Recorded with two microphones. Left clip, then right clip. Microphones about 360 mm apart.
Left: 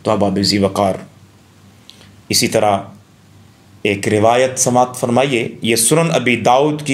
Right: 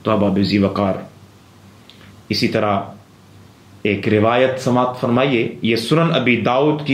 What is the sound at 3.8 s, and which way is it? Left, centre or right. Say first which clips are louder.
Speech: left 2 dB; left.